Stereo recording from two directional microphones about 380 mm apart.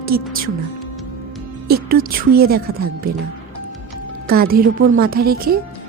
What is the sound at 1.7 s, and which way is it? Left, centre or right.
A woman's voice, right.